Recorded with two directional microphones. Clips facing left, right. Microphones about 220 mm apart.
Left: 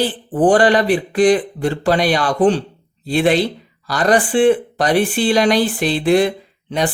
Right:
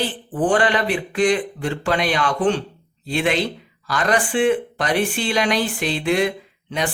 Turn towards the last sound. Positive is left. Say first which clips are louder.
# left 5 dB
turn(degrees=35)  # may be behind; listen again after turning